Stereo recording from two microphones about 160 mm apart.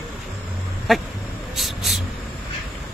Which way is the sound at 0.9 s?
Centre (ahead or behind).